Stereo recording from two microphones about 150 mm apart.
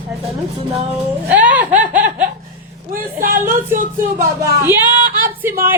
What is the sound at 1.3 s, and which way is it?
Chuckle, 10° right (ahead or behind).